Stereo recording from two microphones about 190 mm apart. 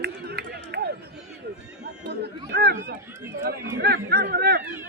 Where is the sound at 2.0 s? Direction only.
60° right (ahead or behind).